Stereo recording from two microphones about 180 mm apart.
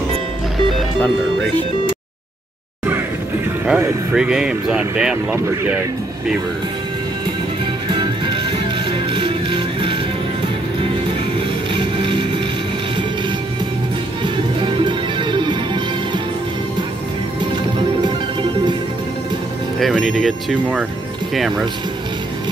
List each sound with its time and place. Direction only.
3.6 s speech: 5° right (ahead or behind)
7.9 s music: 25° right (ahead or behind)
11.7 s music: 30° right (ahead or behind)
14.2 s music: 25° right (ahead or behind)
18.0 s music: 25° right (ahead or behind)
19.8 s speech: centre (ahead or behind)